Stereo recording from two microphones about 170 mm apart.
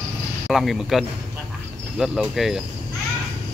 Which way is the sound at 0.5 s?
Centre (ahead or behind).